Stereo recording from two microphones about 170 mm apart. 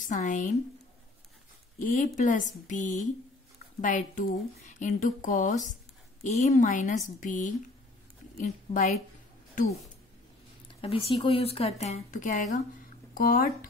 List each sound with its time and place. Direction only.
0.0 s speech: 50° left (ahead or behind)
1.8 s a woman's voice: 50° left (ahead or behind)
10.7 s speech: 30° left (ahead or behind); by 13.7 s 55° left (ahead or behind)